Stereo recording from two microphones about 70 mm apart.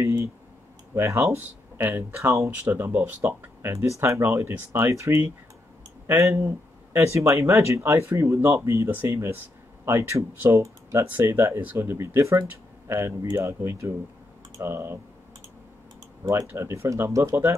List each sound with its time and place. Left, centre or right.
0.0 s a sound: right
0.9 s speech: right
7.1 s speech: right
11.1 s speech: right
16.3 s speech: right